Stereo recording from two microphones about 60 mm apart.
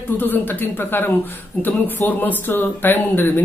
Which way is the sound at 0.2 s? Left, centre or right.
Left.